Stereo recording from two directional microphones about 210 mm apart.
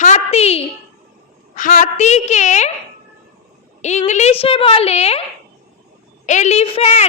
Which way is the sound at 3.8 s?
35° left (ahead or behind).